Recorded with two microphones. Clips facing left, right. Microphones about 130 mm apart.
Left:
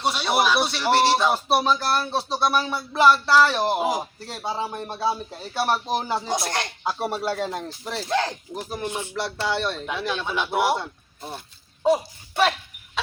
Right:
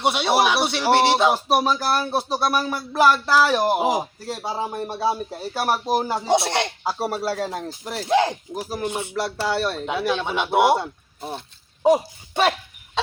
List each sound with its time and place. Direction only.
0.0 s speech: 20° right (ahead or behind); by 6.2 s 5° right (ahead or behind)
6.2 s speech: 25° right (ahead or behind)
6.8 s speech: 5° right (ahead or behind)
11.2 s speech: 5° right (ahead or behind)
11.8 s speech: 20° right (ahead or behind)